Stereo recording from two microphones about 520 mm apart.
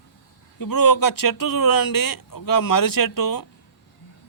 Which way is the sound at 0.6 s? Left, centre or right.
Left.